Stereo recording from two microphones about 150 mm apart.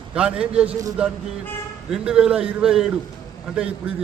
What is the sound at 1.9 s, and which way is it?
A man's voice, 5° right (ahead or behind).